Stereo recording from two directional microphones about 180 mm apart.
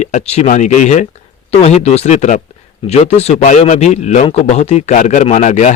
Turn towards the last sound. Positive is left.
turn(degrees=40)  # may be behind; listen again after turning